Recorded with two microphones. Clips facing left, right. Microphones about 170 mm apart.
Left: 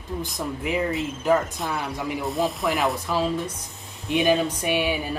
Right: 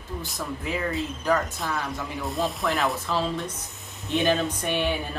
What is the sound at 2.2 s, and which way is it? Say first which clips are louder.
Rub: left 2 dB; centre (ahead or behind).